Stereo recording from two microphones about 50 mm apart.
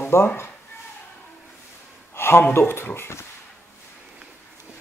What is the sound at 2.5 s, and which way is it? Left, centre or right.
Speech, left.